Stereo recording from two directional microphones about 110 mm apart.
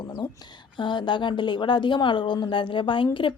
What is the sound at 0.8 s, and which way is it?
Speech, 45° left (ahead or behind).